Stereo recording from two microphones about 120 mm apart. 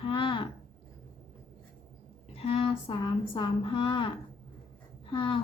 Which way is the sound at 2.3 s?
55° left (ahead or behind).